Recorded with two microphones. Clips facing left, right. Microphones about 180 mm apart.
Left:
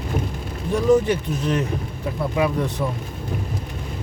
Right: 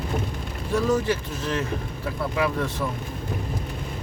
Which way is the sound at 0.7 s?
15° left (ahead or behind).